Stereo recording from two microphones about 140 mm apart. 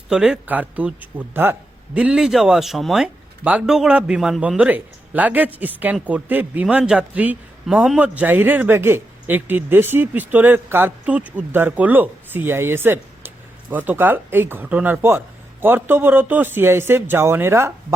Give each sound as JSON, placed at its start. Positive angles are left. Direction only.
{"t": 0.1, "sound": "speech", "side_deg": -5}